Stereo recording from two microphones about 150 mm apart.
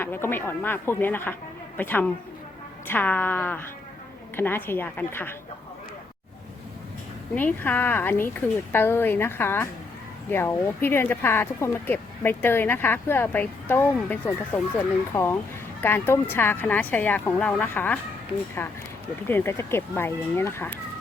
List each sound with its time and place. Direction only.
0.0 s speech: 15° left (ahead or behind)
7.3 s speech: 10° left (ahead or behind)
19.3 s speech: 15° left (ahead or behind)